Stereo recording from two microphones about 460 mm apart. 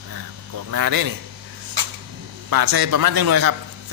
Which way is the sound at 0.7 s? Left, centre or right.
Right.